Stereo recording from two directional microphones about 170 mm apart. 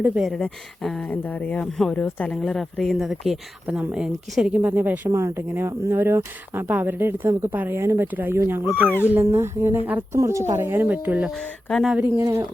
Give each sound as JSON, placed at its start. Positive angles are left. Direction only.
{"t": 0.2, "sound": "speech", "side_deg": 0}
{"t": 12.1, "sound": "speech", "side_deg": -15}